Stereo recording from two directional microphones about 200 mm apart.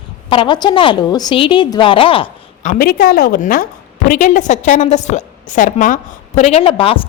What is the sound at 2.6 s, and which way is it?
A woman's voice, 45° left (ahead or behind).